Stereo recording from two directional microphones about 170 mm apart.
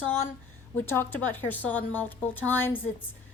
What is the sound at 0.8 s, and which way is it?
A woman's voice, 10° left (ahead or behind).